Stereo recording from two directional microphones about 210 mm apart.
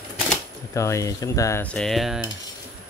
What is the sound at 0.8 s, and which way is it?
Speech, 15° left (ahead or behind).